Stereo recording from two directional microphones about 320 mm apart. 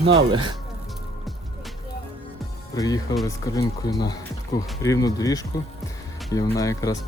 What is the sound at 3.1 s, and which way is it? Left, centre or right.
Speech, centre.